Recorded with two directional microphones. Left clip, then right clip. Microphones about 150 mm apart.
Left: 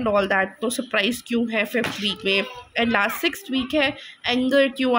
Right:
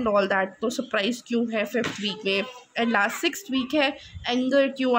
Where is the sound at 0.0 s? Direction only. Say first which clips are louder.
Left 2 dB; centre (ahead or behind).